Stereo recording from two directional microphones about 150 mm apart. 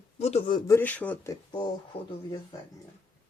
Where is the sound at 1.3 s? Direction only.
30° left (ahead or behind).